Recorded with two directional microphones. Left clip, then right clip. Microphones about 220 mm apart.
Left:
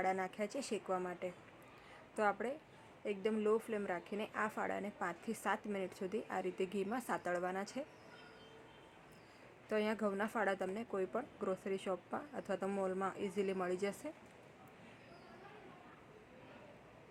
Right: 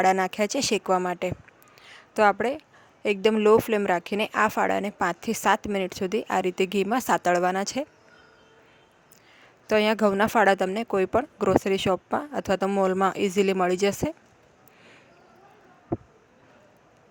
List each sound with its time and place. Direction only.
0.0 s speech: 50° right (ahead or behind)
1.9 s a sound: 45° right (ahead or behind)
3.0 s speech: 50° right (ahead or behind)
9.6 s speech: 45° right (ahead or behind)